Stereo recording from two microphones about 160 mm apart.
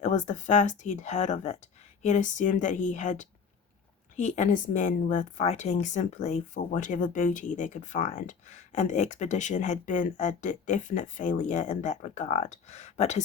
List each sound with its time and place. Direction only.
0.0 s speech: 50° left (ahead or behind)